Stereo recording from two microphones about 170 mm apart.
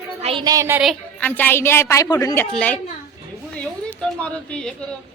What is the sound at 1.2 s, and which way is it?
A woman's voice, 10° left (ahead or behind).